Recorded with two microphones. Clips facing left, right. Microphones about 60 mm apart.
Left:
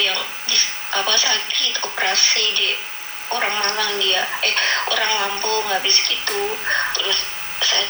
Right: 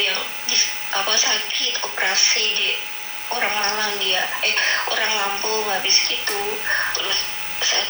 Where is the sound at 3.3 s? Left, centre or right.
Left.